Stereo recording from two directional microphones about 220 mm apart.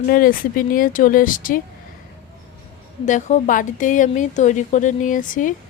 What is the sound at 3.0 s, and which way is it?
Speech, 35° left (ahead or behind).